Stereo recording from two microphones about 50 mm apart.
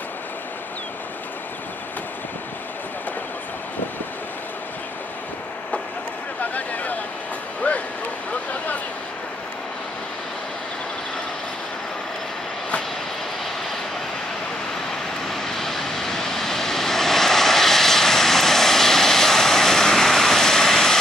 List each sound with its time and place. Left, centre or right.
6.4 s a sound: left
7.7 s bow-wow: left
15.2 s vehicle: centre